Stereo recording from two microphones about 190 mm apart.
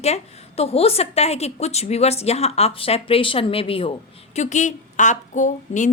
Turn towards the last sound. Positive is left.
turn(degrees=40)  # may be behind; listen again after turning